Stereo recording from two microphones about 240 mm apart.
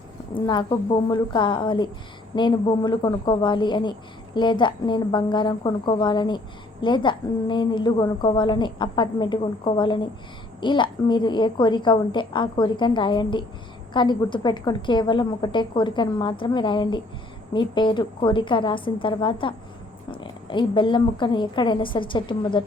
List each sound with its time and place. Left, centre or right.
0.3 s a woman's voice: centre